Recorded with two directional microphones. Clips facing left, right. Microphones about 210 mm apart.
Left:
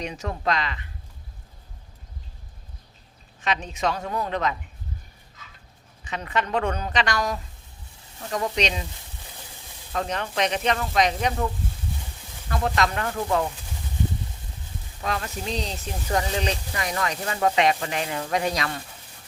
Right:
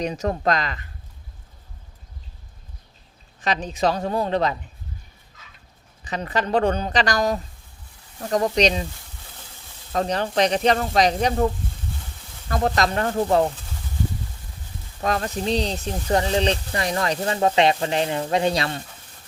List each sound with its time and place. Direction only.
0.0 s speech: 40° right (ahead or behind)
3.4 s speech: 35° right (ahead or behind)
6.1 s speech: 35° right (ahead or behind)
9.9 s speech: 35° right (ahead or behind)
12.5 s speech: 40° right (ahead or behind)
15.0 s speech: 40° right (ahead or behind)